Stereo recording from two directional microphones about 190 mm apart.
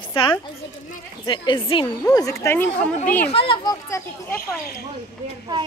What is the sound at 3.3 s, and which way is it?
A child's voice, 25° left (ahead or behind).